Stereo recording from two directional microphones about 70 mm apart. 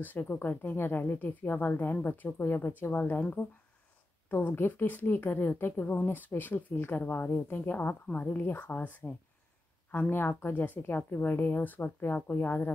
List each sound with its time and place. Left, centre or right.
0.0 s a woman's voice: left